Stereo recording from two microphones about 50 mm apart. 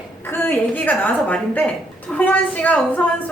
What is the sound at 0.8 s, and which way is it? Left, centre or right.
A woman's voice, left.